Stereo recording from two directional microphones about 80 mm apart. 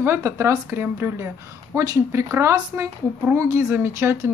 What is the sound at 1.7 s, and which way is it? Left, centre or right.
A woman's voice, right.